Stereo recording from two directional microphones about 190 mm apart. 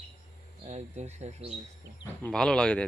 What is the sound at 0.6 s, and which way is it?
Speech, 35° right (ahead or behind).